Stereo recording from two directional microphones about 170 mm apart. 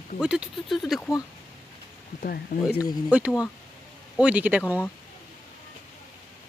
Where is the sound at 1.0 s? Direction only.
20° left (ahead or behind).